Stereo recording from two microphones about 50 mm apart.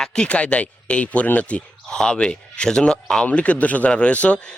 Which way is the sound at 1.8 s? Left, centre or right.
Centre.